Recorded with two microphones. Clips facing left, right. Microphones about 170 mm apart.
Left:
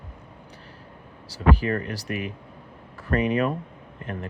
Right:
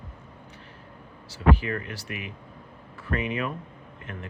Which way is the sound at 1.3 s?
40° left (ahead or behind).